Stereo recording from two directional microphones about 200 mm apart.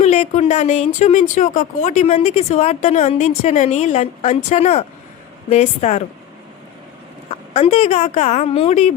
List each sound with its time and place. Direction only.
0.0 s a woman's voice: 35° left (ahead or behind)
7.5 s a woman's voice: 30° left (ahead or behind)